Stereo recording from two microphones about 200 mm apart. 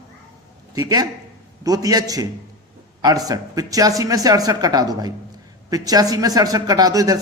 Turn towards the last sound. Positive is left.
turn(degrees=-20)  # may be behind; listen again after turning